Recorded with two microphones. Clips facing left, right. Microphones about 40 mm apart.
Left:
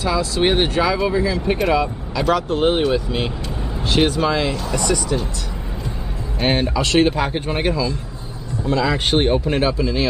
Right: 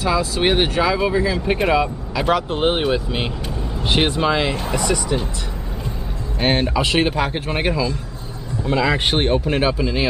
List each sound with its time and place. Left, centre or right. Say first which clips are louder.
0.0 s speech: even; centre
4.7 s speech: left 1 dB; centre
6.4 s speech: right 1 dB; centre
7.5 s speech: right 1 dB; centre